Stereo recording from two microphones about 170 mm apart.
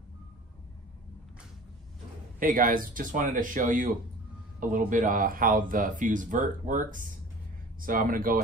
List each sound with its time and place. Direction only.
2.4 s speech: 55° right (ahead or behind)